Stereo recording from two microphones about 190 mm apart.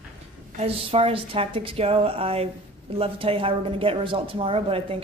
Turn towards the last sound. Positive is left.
turn(degrees=-30)  # may be behind; listen again after turning